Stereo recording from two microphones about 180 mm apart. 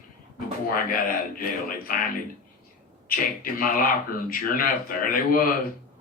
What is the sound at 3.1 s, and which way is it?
Speech, 50° left (ahead or behind).